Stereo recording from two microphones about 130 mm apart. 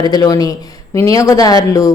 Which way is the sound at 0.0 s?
30° left (ahead or behind).